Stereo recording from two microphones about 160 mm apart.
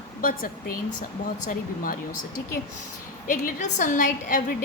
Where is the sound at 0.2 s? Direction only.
60° left (ahead or behind).